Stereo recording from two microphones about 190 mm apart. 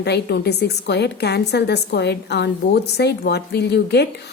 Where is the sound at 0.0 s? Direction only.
60° left (ahead or behind).